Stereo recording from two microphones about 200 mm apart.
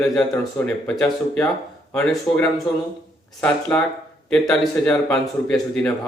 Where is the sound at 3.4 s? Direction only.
5° left (ahead or behind).